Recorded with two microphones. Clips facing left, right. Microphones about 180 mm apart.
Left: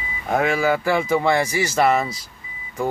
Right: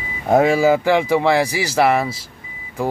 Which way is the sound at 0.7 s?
15° right (ahead or behind).